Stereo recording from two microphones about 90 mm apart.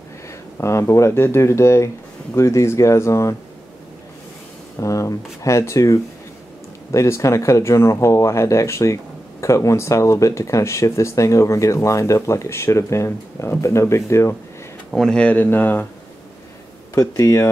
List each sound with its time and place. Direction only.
0.6 s speech: 35° left (ahead or behind)
4.7 s speech: 35° left (ahead or behind)
14.9 s speech: centre (ahead or behind)
15.1 s speech: 15° left (ahead or behind)
16.9 s speech: 40° left (ahead or behind)